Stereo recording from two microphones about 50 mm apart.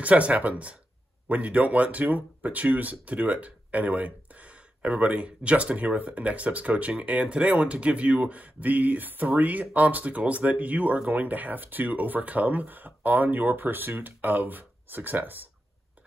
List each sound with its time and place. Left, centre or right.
0.0 s speech: right